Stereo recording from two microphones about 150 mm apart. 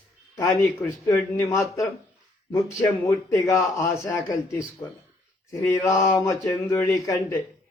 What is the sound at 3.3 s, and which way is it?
Speech, 20° left (ahead or behind).